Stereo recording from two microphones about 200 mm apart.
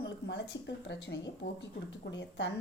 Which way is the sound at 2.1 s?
60° left (ahead or behind).